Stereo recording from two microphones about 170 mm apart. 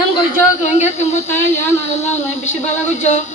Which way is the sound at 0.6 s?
40° left (ahead or behind).